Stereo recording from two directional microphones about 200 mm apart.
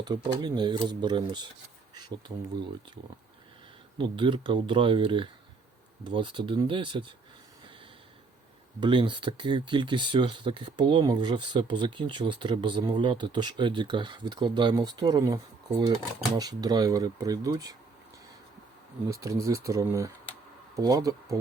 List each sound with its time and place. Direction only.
0.0 s speech: 20° right (ahead or behind)
3.9 s speech: 25° right (ahead or behind)
8.8 s speech: 25° right (ahead or behind)
16.4 s speech: 20° right (ahead or behind)
19.1 s speech: 15° right (ahead or behind)